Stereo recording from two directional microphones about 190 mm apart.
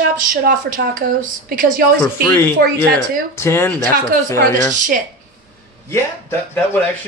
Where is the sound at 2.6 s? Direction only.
50° right (ahead or behind).